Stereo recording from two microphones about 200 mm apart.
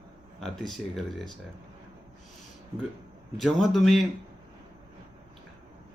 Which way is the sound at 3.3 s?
Centre (ahead or behind).